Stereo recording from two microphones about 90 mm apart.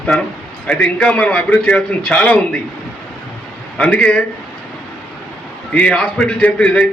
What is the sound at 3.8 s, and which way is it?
Speech, 10° left (ahead or behind).